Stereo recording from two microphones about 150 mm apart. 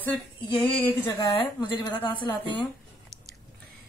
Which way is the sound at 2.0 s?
35° left (ahead or behind).